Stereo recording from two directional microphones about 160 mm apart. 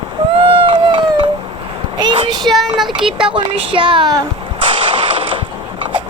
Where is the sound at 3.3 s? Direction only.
30° right (ahead or behind).